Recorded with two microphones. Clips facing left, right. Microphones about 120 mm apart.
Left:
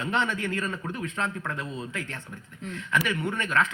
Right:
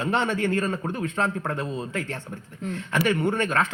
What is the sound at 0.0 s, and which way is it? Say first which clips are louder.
A man's voice: right 4 dB; 30° right (ahead or behind).